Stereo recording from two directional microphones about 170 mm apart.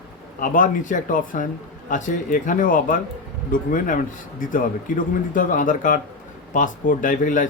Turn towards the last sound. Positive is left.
turn(degrees=50)  # may be behind; listen again after turning